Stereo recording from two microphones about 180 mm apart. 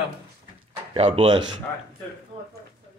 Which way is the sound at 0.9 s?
30° right (ahead or behind).